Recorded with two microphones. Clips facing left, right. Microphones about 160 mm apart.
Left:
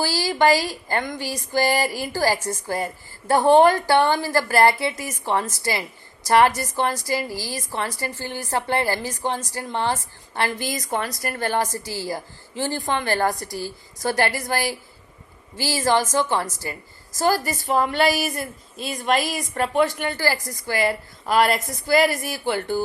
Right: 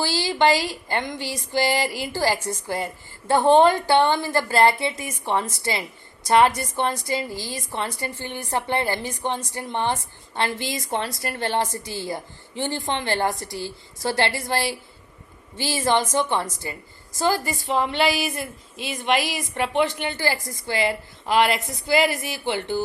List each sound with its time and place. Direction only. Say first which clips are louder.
0.2 s a woman's voice: left 1 dB; 25° right (ahead or behind)
17.2 s a woman's voice: left 2 dB; 45° left (ahead or behind)
20.0 s a woman's voice: left 2 dB; 20° right (ahead or behind)
20.8 s speech: left 1 dB; 40° left (ahead or behind)